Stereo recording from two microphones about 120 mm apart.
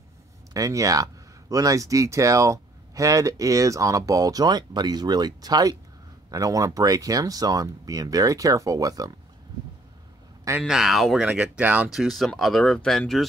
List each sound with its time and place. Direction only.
0.5 s speech: 30° right (ahead or behind)
10.6 s speech: centre (ahead or behind)
11.9 s speech: centre (ahead or behind)